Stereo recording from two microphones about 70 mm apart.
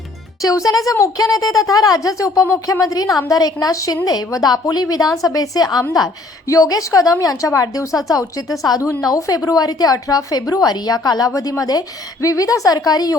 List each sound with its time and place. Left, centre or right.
0.4 s a woman's voice: left
4.0 s a woman's voice: left
8.8 s a woman's voice: left
11.3 s a woman's voice: left